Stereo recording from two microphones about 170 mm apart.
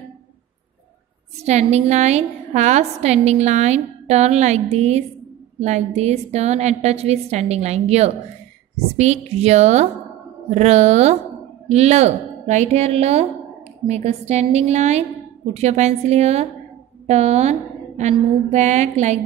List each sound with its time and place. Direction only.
1.4 s a woman's voice: 40° right (ahead or behind)